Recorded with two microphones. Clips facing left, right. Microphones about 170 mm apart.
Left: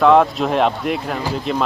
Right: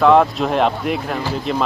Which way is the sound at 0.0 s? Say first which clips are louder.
Even; centre (ahead or behind).